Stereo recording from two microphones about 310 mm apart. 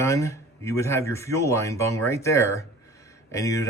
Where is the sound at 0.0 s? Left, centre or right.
Centre.